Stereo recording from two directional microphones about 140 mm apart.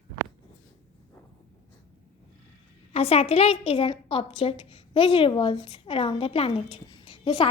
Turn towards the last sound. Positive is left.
turn(degrees=35)  # may be behind; listen again after turning